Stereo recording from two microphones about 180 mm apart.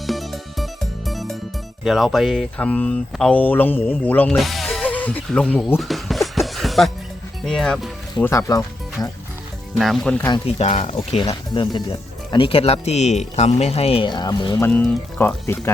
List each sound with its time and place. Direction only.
0.1 s music: centre (ahead or behind)
1.8 s speech: centre (ahead or behind)
8.2 s speech: 15° left (ahead or behind)
9.7 s speech: centre (ahead or behind)
10.2 s speech: 20° left (ahead or behind)
10.4 s speech: 40° left (ahead or behind)
14.6 s speech: 5° left (ahead or behind)